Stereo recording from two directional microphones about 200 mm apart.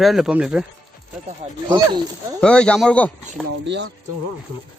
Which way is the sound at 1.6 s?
20° right (ahead or behind).